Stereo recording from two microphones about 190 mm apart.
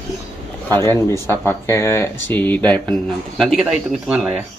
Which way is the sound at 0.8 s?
15° left (ahead or behind).